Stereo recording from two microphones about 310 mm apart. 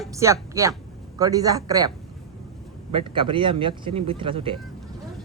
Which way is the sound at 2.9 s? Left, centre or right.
Centre.